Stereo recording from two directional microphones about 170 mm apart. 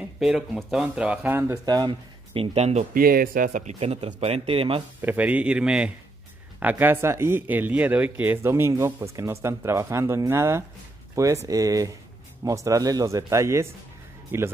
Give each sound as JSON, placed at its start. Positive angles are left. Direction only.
{"t": 0.2, "sound": "speech", "side_deg": -5}
{"t": 2.3, "sound": "speech", "side_deg": -35}
{"t": 3.0, "sound": "speech", "side_deg": -60}
{"t": 3.4, "sound": "speech", "side_deg": -45}
{"t": 5.0, "sound": "speech", "side_deg": -10}